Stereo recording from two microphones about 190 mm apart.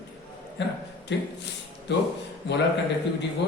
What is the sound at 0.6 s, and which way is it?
Speech, 65° left (ahead or behind).